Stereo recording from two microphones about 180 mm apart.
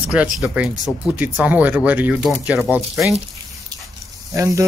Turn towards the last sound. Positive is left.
turn(degrees=-15)  # may be behind; listen again after turning